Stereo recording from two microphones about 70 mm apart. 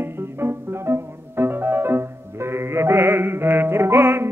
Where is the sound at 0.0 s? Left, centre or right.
Right.